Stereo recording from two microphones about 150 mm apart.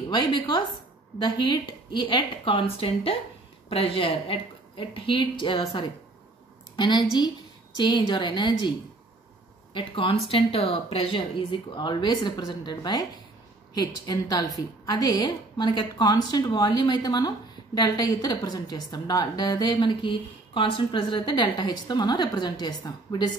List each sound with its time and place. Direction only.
0.1 s a woman's voice: 30° left (ahead or behind)
9.8 s a woman's voice: 35° left (ahead or behind)